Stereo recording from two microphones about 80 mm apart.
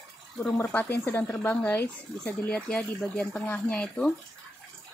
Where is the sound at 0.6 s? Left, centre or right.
Left.